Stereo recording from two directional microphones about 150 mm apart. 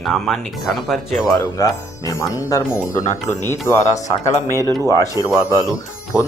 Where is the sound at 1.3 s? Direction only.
20° left (ahead or behind).